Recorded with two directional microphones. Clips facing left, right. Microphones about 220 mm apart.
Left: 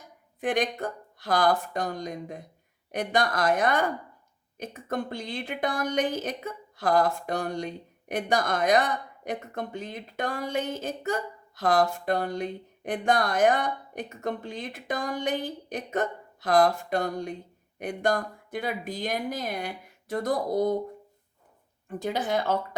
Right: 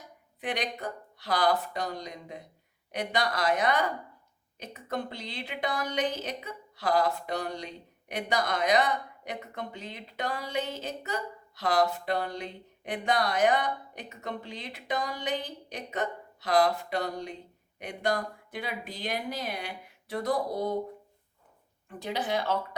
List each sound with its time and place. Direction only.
0.3 s a woman's voice: 50° left (ahead or behind)
21.8 s a woman's voice: 45° left (ahead or behind)